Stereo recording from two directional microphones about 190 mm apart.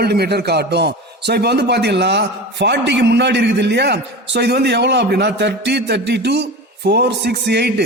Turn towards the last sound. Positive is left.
turn(degrees=-60)  # may be behind; listen again after turning